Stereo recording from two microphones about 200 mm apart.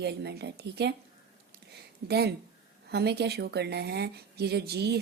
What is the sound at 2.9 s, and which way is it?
A woman's voice, 55° right (ahead or behind).